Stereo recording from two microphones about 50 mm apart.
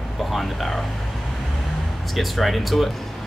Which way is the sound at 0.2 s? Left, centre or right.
Centre.